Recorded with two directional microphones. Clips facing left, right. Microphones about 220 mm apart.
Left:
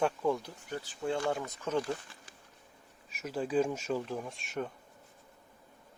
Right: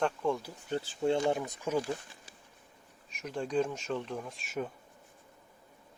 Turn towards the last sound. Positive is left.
turn(degrees=0)  # may be behind; listen again after turning